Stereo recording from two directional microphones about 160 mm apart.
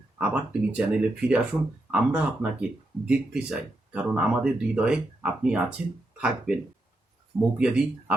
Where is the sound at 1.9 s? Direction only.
5° right (ahead or behind).